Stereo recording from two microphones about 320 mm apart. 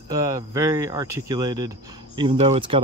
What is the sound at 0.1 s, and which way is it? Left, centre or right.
Speech, centre.